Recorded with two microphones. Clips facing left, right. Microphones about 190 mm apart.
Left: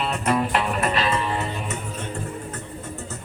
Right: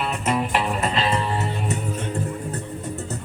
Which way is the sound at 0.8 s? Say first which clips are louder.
Even; 30° right (ahead or behind).